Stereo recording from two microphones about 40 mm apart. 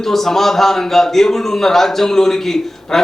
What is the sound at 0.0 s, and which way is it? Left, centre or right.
A man's voice, centre.